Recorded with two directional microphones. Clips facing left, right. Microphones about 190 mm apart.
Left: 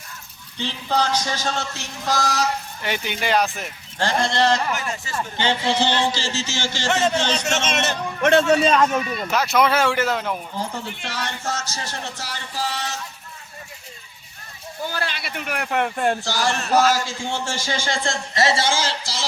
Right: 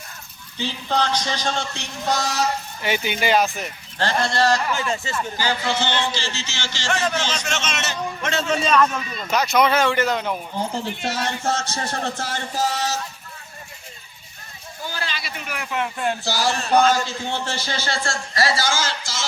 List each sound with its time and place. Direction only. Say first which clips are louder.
0.6 s speech: even; 5° left (ahead or behind)
3.9 s speech: left 1 dB; 15° left (ahead or behind)
4.7 s speech: right 3 dB; 25° right (ahead or behind)
5.1 s a man's voice: left 1 dB; 25° left (ahead or behind); by 6.8 s 45° left (ahead or behind)
6.8 s speech: left 3 dB; 20° left (ahead or behind)
7.4 s a man's voice: left 4 dB; 45° left (ahead or behind)
8.4 s speech: left 2 dB; 30° left (ahead or behind)
9.3 s speech: right 1 dB; centre (ahead or behind)
10.5 s speech: right 3 dB; 25° right (ahead or behind)
11.6 s a man's voice: right 5 dB; 55° right (ahead or behind); by 13.0 s 40° right (ahead or behind)
14.9 s speech: left 3 dB; 60° left (ahead or behind)
16.2 s speech: even; 10° right (ahead or behind)
16.9 s a man's voice: right 1 dB; 10° left (ahead or behind); by 19.2 s 30° left (ahead or behind)